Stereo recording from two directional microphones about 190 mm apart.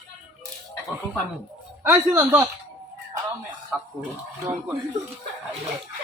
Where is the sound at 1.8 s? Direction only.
15° right (ahead or behind).